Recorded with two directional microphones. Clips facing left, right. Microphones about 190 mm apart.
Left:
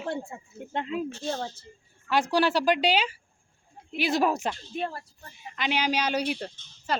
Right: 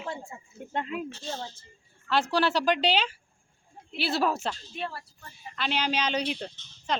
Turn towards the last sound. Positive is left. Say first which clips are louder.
# left 1 dB
turn(degrees=5)  # may be behind; listen again after turning